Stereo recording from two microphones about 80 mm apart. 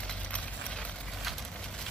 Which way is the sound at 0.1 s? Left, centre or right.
Centre.